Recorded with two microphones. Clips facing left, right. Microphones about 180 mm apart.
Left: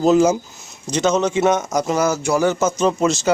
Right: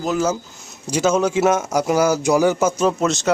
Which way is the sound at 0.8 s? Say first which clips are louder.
Even; 10° right (ahead or behind).